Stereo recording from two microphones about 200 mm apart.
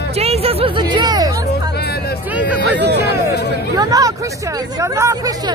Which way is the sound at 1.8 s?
50° left (ahead or behind).